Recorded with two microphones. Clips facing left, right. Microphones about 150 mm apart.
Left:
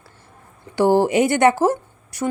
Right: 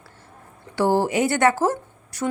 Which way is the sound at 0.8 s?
20° left (ahead or behind).